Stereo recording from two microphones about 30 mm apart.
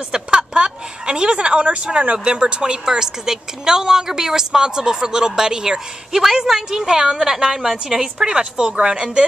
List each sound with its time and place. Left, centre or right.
0.1 s a sound: right
1.0 s a woman's voice: right
2.6 s a woman's voice: right